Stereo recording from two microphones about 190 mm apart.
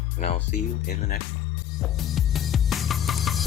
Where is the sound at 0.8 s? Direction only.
50° left (ahead or behind).